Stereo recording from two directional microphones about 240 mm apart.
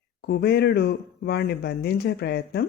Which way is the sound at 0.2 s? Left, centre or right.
Left.